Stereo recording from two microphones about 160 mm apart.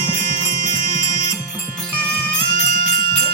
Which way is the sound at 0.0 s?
25° left (ahead or behind).